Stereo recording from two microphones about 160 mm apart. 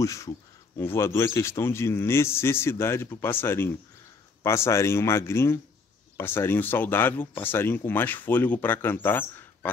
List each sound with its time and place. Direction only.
0.0 s speech: 20° left (ahead or behind)